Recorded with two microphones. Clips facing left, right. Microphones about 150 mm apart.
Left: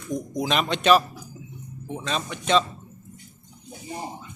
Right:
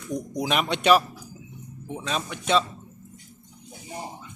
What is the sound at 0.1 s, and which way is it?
Speech, 10° right (ahead or behind).